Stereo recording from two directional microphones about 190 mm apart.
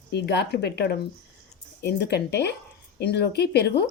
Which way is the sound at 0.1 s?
60° left (ahead or behind).